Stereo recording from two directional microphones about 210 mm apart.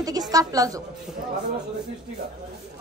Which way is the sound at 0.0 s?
15° right (ahead or behind).